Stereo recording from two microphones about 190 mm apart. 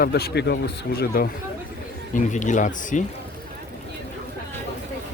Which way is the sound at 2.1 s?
40° left (ahead or behind).